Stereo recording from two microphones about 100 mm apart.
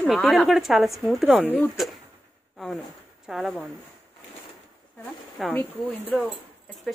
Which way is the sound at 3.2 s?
5° right (ahead or behind).